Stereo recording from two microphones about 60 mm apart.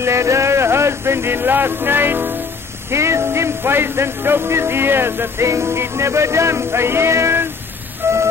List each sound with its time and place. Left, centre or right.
0.0 s speech: right
2.9 s music: right
8.0 s a sound: right